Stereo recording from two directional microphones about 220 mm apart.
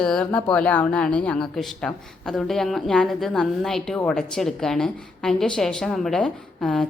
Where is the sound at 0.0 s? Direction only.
5° left (ahead or behind).